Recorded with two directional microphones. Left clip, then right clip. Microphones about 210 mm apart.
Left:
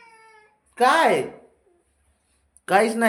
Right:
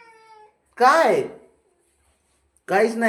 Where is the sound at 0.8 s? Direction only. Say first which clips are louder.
Right 2 dB; 10° left (ahead or behind).